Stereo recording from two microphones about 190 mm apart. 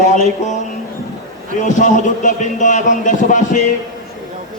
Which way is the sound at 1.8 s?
40° left (ahead or behind).